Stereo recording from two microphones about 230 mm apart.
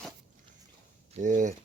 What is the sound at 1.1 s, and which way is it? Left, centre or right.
Speech, right.